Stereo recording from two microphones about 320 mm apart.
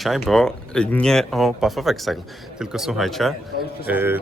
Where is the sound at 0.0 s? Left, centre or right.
Centre.